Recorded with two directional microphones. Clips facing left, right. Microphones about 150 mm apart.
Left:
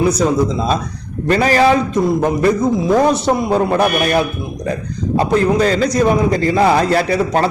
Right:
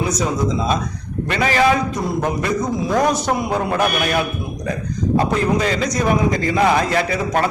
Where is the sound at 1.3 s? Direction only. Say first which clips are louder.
Left 5 dB; 40° left (ahead or behind).